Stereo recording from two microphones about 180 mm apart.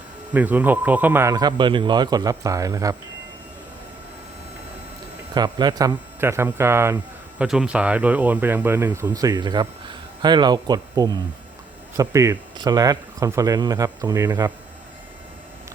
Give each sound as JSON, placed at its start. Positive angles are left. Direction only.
{"t": 0.3, "sound": "speech", "side_deg": -10}
{"t": 5.3, "sound": "speech", "side_deg": -20}
{"t": 7.4, "sound": "speech", "side_deg": -5}